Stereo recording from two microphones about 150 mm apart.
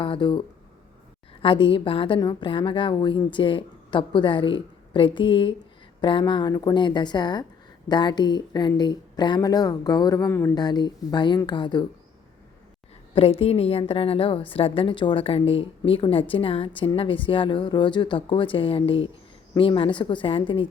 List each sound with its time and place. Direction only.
0.0 s speech: 30° left (ahead or behind)
13.1 s speech: 40° left (ahead or behind)